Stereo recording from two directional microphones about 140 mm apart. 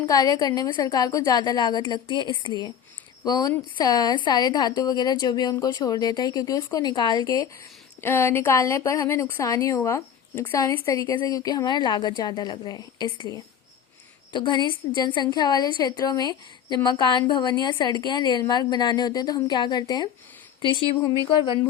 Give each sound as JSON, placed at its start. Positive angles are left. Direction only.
{"t": 0.0, "sound": "a woman's voice", "side_deg": 25}